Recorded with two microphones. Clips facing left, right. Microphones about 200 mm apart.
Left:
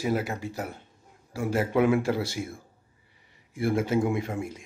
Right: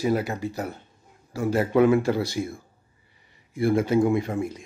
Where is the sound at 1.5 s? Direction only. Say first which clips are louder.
Right 4 dB; 10° left (ahead or behind).